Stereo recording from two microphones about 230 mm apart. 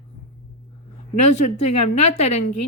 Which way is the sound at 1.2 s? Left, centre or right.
Left.